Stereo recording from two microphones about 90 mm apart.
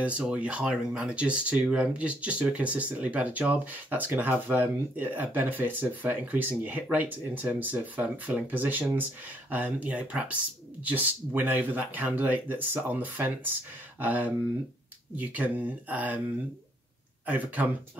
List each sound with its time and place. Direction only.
0.0 s speech: 15° right (ahead or behind)